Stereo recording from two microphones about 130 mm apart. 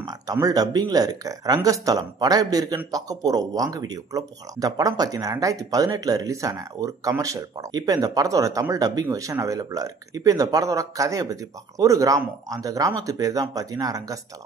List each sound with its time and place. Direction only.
0.0 s speech: 30° right (ahead or behind)